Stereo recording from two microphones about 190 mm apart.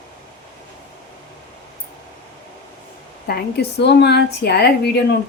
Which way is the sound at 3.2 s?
55° left (ahead or behind).